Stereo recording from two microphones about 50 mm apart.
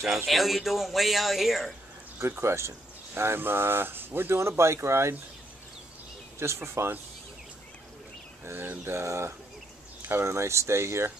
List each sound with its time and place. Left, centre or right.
0.3 s speech: centre
2.1 s speech: right
3.2 s speech: right
4.4 s speech: right
6.4 s speech: right
8.8 s speech: right